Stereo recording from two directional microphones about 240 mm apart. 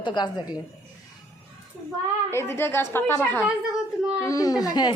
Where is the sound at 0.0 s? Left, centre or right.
Centre.